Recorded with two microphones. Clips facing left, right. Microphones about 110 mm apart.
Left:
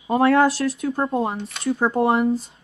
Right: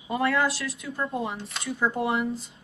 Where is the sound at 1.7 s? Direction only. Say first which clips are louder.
Left 6 dB; 65° left (ahead or behind).